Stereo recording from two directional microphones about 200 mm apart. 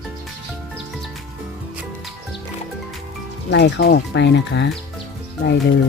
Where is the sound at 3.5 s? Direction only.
60° left (ahead or behind).